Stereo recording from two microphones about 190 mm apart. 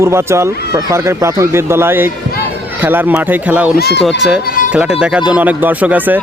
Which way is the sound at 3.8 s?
55° left (ahead or behind).